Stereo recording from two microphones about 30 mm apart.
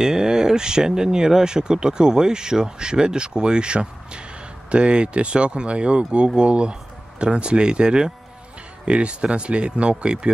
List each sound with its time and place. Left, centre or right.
0.0 s speech: right